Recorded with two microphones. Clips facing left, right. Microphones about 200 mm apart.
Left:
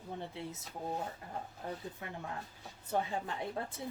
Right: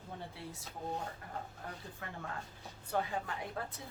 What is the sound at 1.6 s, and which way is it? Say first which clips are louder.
A woman's voice: left 4 dB; 20° left (ahead or behind).